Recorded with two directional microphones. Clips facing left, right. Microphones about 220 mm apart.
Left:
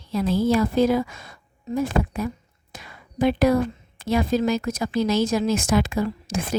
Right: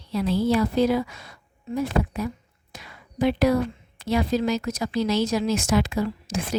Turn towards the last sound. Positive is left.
turn(degrees=55)  # may be behind; listen again after turning